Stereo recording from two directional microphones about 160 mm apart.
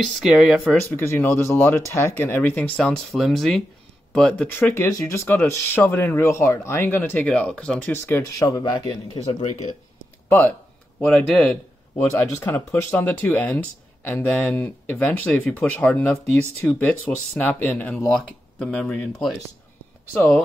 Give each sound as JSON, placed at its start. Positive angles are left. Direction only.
{"t": 0.2, "sound": "speech", "side_deg": -5}
{"t": 0.9, "sound": "speech", "side_deg": 15}
{"t": 7.9, "sound": "speech", "side_deg": 20}
{"t": 9.2, "sound": "speech", "side_deg": 40}
{"t": 11.1, "sound": "speech", "side_deg": 5}
{"t": 11.9, "sound": "speech", "side_deg": 20}